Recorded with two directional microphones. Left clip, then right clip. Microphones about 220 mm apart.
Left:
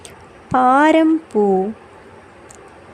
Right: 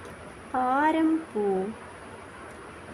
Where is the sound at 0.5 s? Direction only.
40° left (ahead or behind).